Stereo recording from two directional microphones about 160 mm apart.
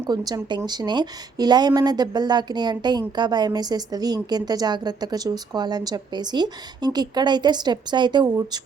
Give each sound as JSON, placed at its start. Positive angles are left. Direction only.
{"t": 0.1, "sound": "a woman's voice", "side_deg": -25}